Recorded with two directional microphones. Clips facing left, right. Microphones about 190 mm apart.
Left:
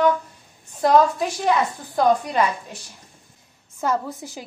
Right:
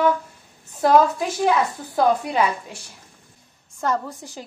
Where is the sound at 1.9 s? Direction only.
10° right (ahead or behind).